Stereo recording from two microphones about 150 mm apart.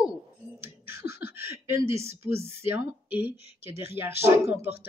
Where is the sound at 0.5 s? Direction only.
15° right (ahead or behind).